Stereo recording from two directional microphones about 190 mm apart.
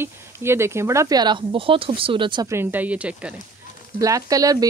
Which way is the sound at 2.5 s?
10° right (ahead or behind).